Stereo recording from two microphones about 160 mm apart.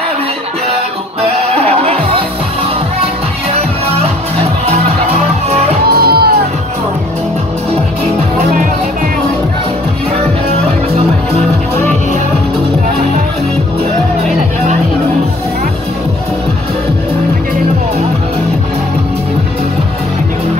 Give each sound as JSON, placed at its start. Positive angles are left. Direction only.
{"t": 5.9, "sound": "music", "side_deg": -75}